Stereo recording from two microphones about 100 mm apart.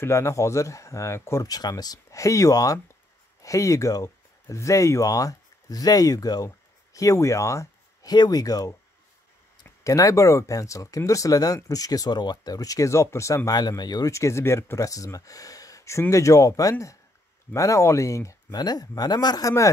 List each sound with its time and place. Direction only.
0.0 s speech: 30° left (ahead or behind)
13.5 s speech: 45° left (ahead or behind)
14.1 s speech: 30° left (ahead or behind)